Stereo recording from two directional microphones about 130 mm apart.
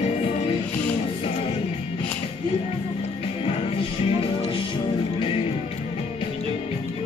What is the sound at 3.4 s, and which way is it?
Music, 45° left (ahead or behind).